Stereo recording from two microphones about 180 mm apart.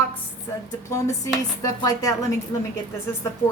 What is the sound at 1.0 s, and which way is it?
A woman's voice, 20° left (ahead or behind).